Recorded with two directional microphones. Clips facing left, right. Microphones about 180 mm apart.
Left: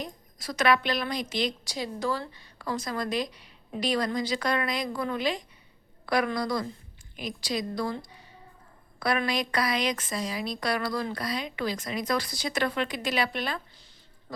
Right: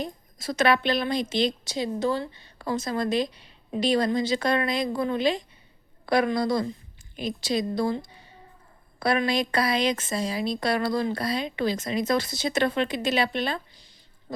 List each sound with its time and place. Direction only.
0.0 s a woman's voice: 25° right (ahead or behind)